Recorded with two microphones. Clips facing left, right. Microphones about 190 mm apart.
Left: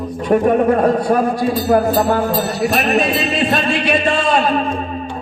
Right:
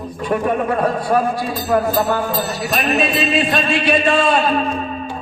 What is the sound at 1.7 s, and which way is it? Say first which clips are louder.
Music: left 2 dB; 40° left (ahead or behind).